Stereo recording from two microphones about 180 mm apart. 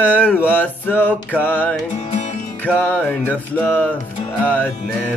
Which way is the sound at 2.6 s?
10° left (ahead or behind).